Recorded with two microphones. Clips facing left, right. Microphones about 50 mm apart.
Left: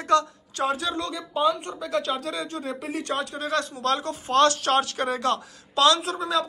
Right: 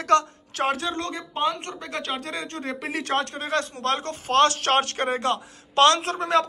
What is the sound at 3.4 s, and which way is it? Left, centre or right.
A man's voice, right.